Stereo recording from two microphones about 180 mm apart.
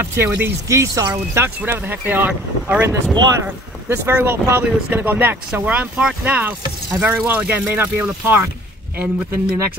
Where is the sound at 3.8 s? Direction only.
15° right (ahead or behind).